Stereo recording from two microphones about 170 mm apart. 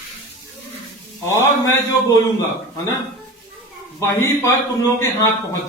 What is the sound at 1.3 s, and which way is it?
Speech, 15° left (ahead or behind).